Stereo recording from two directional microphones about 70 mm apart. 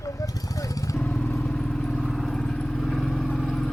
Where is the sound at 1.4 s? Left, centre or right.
Centre.